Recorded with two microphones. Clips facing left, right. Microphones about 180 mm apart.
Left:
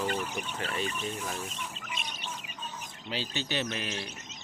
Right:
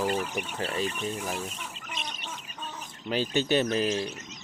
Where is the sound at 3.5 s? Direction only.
40° right (ahead or behind).